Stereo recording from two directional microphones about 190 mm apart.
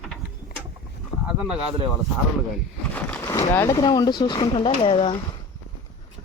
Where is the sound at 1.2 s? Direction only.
5° right (ahead or behind).